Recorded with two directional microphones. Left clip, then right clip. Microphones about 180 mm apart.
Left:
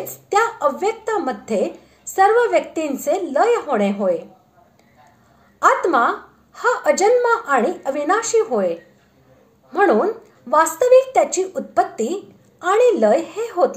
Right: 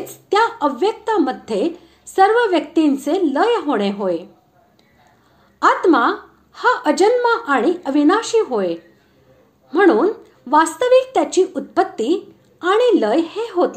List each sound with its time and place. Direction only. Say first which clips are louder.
0.3 s a woman's voice: right 1 dB; 30° right (ahead or behind)
5.6 s a woman's voice: right 1 dB; 30° right (ahead or behind)
9.7 s a woman's voice: right 2 dB; 25° right (ahead or behind)